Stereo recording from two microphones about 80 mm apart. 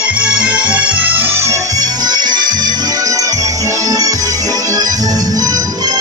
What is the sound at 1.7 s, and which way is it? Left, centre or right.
Music, right.